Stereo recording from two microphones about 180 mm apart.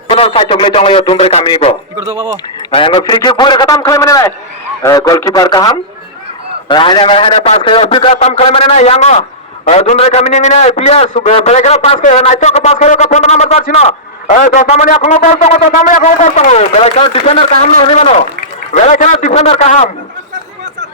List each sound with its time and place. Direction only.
0.1 s a man's voice: 30° left (ahead or behind)